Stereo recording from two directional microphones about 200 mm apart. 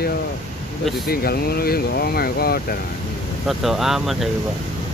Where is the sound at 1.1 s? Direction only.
50° left (ahead or behind).